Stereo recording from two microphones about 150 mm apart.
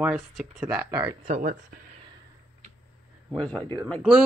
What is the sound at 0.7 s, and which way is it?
Speech, 15° right (ahead or behind).